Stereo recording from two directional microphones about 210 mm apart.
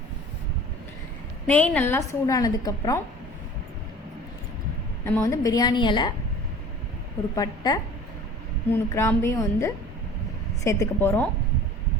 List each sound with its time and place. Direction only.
1.5 s a woman's voice: 5° left (ahead or behind)
5.0 s a woman's voice: 15° left (ahead or behind)
7.3 s a woman's voice: 20° left (ahead or behind)
9.0 s a woman's voice: 10° left (ahead or behind)